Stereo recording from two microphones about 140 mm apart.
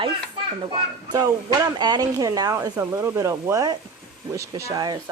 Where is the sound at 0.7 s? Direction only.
30° right (ahead or behind).